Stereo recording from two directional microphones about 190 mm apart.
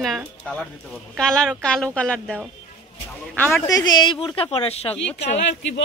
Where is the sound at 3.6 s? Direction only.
20° left (ahead or behind).